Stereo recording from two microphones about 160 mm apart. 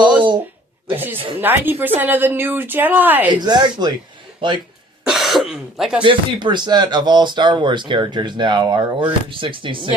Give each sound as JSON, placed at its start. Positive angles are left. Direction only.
{"t": 0.0, "sound": "a sound", "side_deg": -30}
{"t": 0.9, "sound": "a woman's voice", "side_deg": -10}
{"t": 3.2, "sound": "speech", "side_deg": -25}
{"t": 5.0, "sound": "speech", "side_deg": 0}
{"t": 6.0, "sound": "speech", "side_deg": -30}